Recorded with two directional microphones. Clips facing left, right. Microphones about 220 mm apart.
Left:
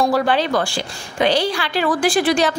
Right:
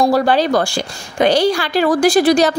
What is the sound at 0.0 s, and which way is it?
A woman's voice, 40° right (ahead or behind).